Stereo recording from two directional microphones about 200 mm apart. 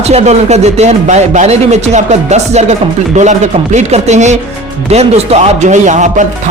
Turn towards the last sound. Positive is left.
turn(degrees=-35)  # may be behind; listen again after turning